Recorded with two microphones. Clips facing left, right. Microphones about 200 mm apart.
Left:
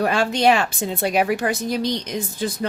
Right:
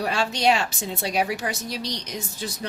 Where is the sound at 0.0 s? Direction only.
55° left (ahead or behind).